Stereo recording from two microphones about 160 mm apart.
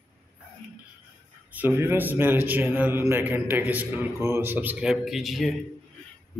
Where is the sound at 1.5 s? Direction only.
10° right (ahead or behind).